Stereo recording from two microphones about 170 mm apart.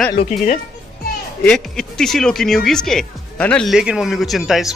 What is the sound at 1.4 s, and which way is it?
Speech, 5° left (ahead or behind).